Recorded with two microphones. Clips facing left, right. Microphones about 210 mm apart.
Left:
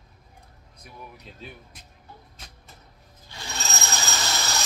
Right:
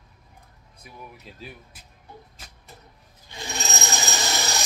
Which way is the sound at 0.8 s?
5° right (ahead or behind).